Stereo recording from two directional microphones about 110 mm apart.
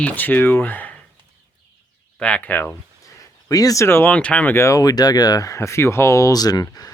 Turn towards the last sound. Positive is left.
turn(degrees=35)  # may be behind; listen again after turning